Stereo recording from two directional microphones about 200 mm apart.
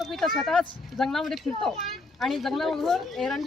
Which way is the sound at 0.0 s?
Centre (ahead or behind).